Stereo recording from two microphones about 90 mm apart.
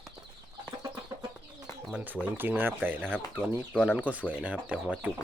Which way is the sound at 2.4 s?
20° right (ahead or behind).